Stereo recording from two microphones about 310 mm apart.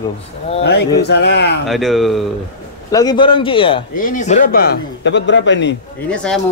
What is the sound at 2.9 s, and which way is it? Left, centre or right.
Speech, centre.